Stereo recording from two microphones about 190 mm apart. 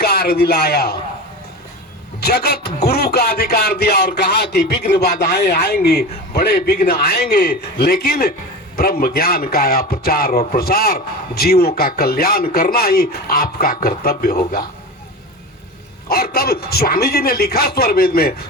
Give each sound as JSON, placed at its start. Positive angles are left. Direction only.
{"t": 0.0, "sound": "a man's voice", "side_deg": 55}
{"t": 2.2, "sound": "a man's voice", "side_deg": 55}
{"t": 16.0, "sound": "a man's voice", "side_deg": 55}